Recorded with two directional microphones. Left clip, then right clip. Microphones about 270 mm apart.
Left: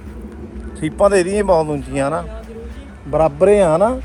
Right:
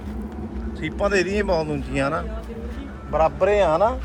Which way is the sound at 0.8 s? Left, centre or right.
Centre.